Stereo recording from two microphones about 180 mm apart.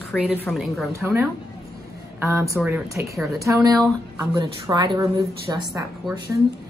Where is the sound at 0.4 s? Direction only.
Centre (ahead or behind).